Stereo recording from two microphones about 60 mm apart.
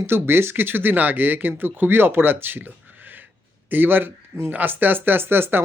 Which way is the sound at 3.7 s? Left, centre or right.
Right.